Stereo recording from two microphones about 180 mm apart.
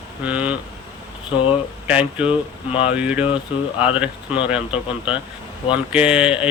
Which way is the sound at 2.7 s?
30° left (ahead or behind).